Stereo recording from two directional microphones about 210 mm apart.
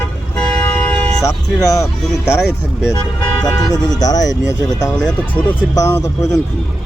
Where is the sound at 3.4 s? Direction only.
20° left (ahead or behind).